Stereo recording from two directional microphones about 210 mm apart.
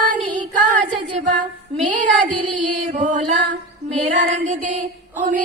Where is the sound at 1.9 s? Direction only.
35° right (ahead or behind).